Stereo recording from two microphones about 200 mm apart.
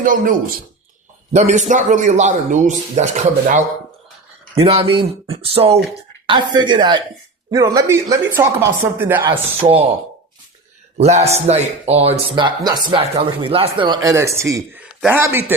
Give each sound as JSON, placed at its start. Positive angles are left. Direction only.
{"t": 0.0, "sound": "a man's voice", "side_deg": -40}
{"t": 4.6, "sound": "speech", "side_deg": -30}
{"t": 9.6, "sound": "speech", "side_deg": -30}
{"t": 10.9, "sound": "a man's voice", "side_deg": -35}